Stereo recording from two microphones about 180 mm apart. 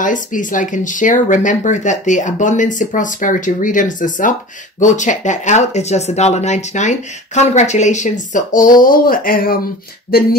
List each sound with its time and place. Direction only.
0.0 s speech: 45° left (ahead or behind)